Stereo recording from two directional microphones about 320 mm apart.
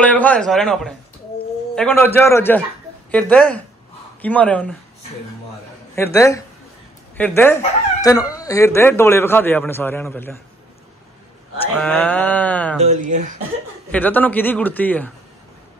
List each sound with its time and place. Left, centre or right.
0.0 s a man's voice: centre
5.9 s a man's voice: centre
11.6 s a man's voice: centre
12.8 s speech: right
13.9 s a man's voice: centre